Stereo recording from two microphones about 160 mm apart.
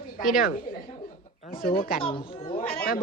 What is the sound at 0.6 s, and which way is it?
Speech, 35° left (ahead or behind).